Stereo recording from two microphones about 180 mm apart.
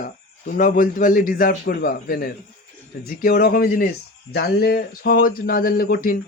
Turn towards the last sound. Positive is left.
turn(degrees=55)  # may be behind; listen again after turning